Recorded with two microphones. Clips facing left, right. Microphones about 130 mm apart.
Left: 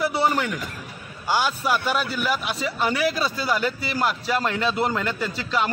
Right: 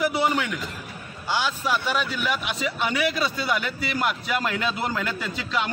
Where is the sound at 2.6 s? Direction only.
40° left (ahead or behind).